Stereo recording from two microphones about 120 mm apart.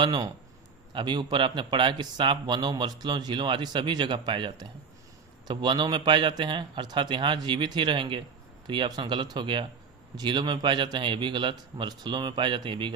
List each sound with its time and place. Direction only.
0.0 s speech: 35° right (ahead or behind)